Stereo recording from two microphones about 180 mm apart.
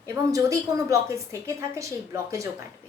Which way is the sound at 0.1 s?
15° right (ahead or behind).